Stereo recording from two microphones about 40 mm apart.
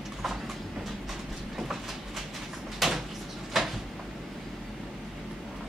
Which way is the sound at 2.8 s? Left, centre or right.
Centre.